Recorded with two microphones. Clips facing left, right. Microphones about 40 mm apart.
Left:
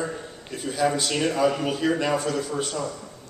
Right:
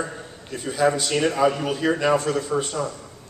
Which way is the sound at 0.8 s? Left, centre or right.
Right.